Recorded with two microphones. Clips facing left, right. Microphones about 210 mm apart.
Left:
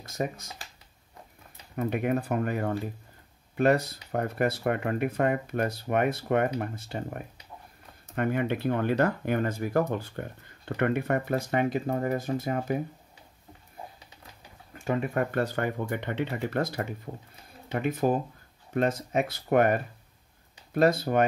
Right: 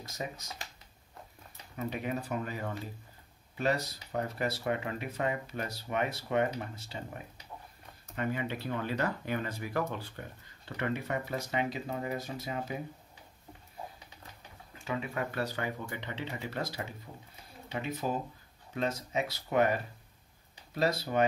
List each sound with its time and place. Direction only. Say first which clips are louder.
0.0 s speech: left 8 dB; 55° left (ahead or behind)
1.8 s speech: left 8 dB; 55° left (ahead or behind)
14.7 s speech: left 8 dB; 50° left (ahead or behind)